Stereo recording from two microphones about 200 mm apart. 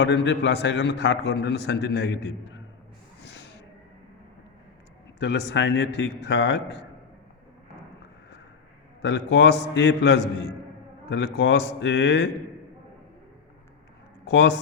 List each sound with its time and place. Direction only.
0.0 s a man's voice: 60° left (ahead or behind)
5.2 s a man's voice: 60° left (ahead or behind)
9.0 s a man's voice: 60° left (ahead or behind)
14.3 s speech: 60° left (ahead or behind)